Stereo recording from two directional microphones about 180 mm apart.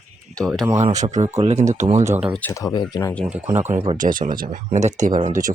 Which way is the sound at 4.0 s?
45° right (ahead or behind).